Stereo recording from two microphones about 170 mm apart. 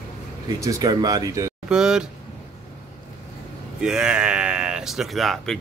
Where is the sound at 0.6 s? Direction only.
20° right (ahead or behind).